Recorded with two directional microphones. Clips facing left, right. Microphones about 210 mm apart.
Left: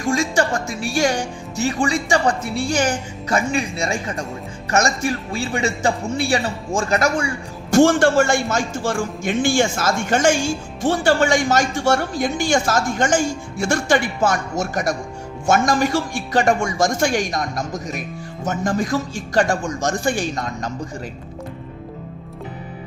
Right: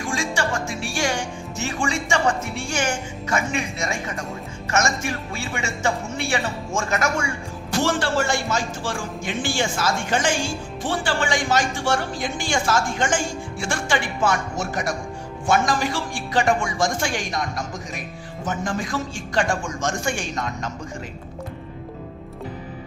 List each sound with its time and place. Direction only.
0.1 s speech: 40° left (ahead or behind)
7.8 s a woman's voice: 50° left (ahead or behind)
18.4 s speech: 40° left (ahead or behind)